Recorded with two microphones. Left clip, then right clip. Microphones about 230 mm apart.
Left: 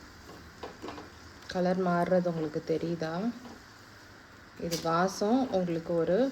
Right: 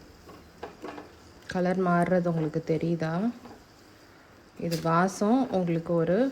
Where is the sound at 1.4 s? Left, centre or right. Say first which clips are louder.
Right 2 dB; right.